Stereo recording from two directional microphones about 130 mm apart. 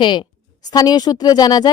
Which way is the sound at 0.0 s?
35° left (ahead or behind).